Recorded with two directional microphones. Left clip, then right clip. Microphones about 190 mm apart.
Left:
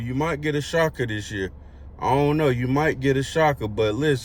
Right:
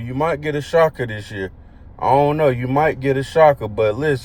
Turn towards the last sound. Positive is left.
turn(degrees=15)  # may be behind; listen again after turning